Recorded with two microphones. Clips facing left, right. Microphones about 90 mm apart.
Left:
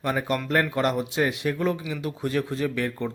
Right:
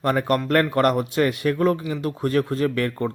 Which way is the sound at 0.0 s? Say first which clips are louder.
Right 5 dB; 55° right (ahead or behind).